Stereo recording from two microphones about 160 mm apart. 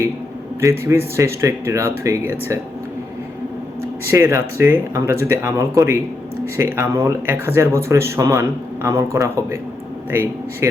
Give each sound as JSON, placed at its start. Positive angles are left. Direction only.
{"t": 0.6, "sound": "speech", "side_deg": -15}
{"t": 4.1, "sound": "speech", "side_deg": -15}
{"t": 10.6, "sound": "speech", "side_deg": -15}